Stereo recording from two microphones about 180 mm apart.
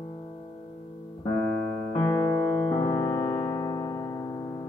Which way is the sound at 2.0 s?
20° left (ahead or behind).